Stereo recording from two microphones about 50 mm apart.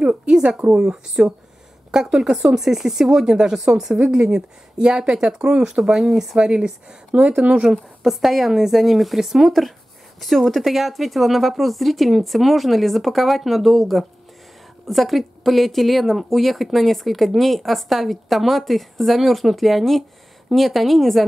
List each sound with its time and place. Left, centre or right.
0.0 s speech: right; by 6.3 s centre
6.3 s speech: centre
7.6 s speech: centre